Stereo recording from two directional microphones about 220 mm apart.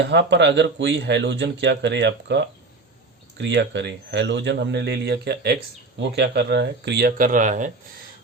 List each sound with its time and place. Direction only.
0.0 s speech: 50° right (ahead or behind); by 7.7 s 35° right (ahead or behind)